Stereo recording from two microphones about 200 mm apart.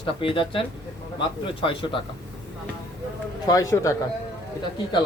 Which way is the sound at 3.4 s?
15° left (ahead or behind).